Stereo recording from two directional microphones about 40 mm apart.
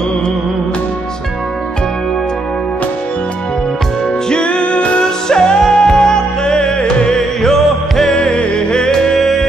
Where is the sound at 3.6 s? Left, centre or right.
Centre; by 5.0 s left.